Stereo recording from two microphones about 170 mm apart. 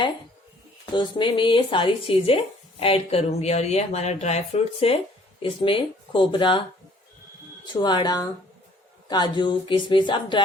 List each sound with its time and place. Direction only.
0.9 s speech: 30° left (ahead or behind)
7.6 s speech: 25° left (ahead or behind)